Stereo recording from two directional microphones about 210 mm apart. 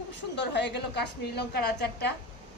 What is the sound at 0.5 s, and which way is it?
A woman's voice, 55° left (ahead or behind).